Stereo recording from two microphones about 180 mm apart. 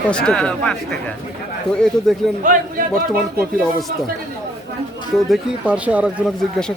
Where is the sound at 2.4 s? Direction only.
50° right (ahead or behind).